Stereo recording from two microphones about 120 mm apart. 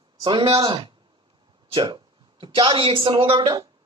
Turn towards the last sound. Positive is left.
turn(degrees=-45)  # may be behind; listen again after turning